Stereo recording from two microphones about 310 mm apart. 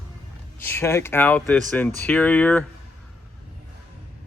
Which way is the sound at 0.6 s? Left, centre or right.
Centre.